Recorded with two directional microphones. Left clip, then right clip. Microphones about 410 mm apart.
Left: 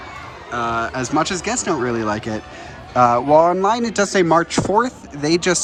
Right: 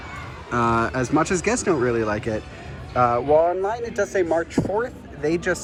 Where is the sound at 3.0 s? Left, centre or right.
Left.